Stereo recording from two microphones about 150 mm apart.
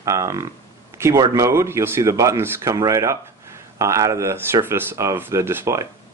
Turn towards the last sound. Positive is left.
turn(degrees=-20)  # may be behind; listen again after turning